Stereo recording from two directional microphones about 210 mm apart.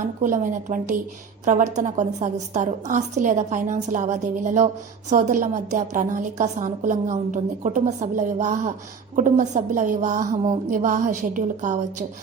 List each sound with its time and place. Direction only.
0.2 s a woman's voice: 40° right (ahead or behind)